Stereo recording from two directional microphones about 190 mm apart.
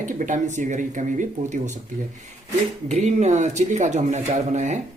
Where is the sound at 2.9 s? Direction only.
35° right (ahead or behind).